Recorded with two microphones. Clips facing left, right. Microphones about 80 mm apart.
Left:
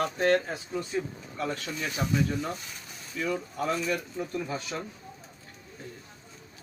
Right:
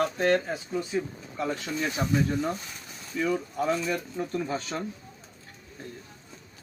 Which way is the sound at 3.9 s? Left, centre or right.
Centre.